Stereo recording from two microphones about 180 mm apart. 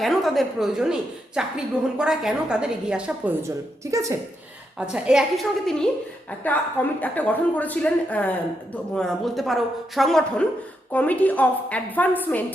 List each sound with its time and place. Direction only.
0.0 s a woman's voice: centre (ahead or behind)
3.9 s a woman's voice: 15° right (ahead or behind)
4.8 s a woman's voice: 5° right (ahead or behind)
7.0 s a woman's voice: 10° left (ahead or behind)